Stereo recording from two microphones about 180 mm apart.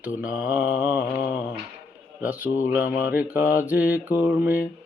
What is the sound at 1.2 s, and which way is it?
Mantra, 20° left (ahead or behind).